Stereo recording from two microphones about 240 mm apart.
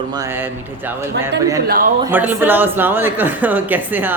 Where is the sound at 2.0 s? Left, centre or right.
Centre.